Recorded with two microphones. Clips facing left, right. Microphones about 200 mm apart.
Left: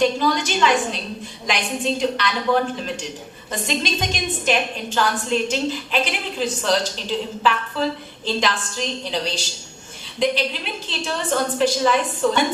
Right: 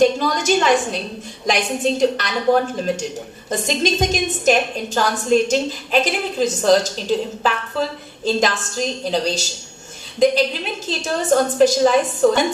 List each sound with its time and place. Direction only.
0.0 s a woman's voice: 45° right (ahead or behind)
10.8 s a woman's voice: 45° right (ahead or behind)